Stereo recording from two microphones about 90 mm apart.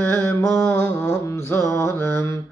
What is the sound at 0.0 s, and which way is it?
Mantra, 25° left (ahead or behind).